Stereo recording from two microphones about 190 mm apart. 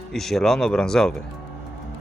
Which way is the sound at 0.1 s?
Centre (ahead or behind).